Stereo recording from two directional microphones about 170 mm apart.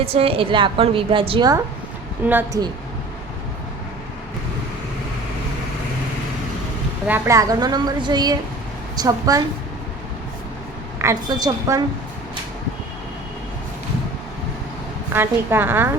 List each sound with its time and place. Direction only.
0.0 s a woman's voice: 35° right (ahead or behind)
2.2 s a woman's voice: 10° right (ahead or behind)
7.1 s a woman's voice: 20° right (ahead or behind)
11.0 s a woman's voice: 20° right (ahead or behind)
15.1 s a woman's voice: 15° right (ahead or behind)